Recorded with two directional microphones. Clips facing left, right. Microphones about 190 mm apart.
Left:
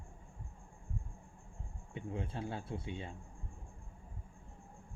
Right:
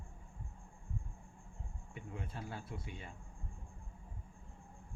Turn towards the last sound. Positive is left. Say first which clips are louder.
# left 6 dB
turn(degrees=25)  # may be behind; listen again after turning